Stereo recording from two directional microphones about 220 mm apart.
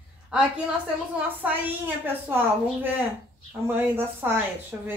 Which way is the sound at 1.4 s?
10° right (ahead or behind).